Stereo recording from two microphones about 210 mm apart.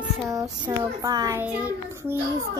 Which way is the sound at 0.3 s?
15° right (ahead or behind).